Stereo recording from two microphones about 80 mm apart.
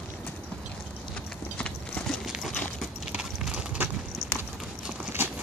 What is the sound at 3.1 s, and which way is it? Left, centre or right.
Clip-clop, centre.